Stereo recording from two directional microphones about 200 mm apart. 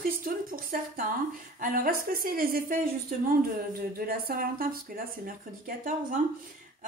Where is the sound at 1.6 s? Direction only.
45° right (ahead or behind).